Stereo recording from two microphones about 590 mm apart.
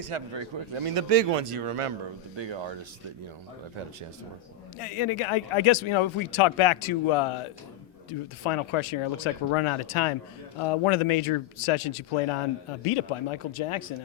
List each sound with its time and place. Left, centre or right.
0.1 s speech: right
2.3 s speech: right
4.8 s speech: left
8.4 s speech: left